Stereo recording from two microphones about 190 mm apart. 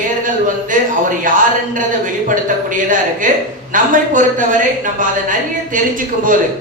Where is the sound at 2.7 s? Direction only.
45° right (ahead or behind).